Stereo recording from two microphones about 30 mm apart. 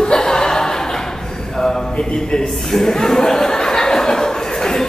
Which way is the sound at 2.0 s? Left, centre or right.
Left.